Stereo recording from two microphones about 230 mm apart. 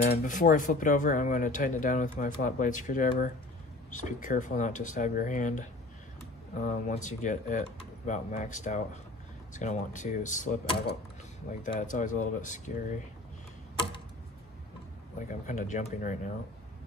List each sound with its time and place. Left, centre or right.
0.1 s speech: left
15.1 s speech: left